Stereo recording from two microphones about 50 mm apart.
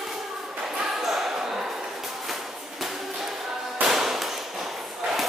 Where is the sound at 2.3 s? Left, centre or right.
Centre.